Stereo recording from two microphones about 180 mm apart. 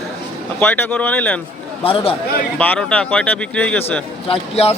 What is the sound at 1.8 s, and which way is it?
Speech, 30° left (ahead or behind).